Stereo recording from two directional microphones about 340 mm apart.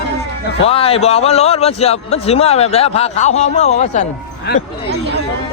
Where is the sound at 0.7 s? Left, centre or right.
Centre.